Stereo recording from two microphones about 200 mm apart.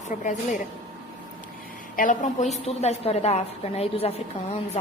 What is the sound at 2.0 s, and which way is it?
A woman's voice, 40° left (ahead or behind).